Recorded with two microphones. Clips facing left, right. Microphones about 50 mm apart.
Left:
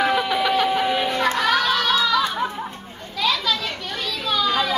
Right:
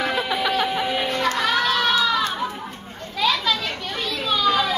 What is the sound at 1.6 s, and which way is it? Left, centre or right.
Crowd, centre.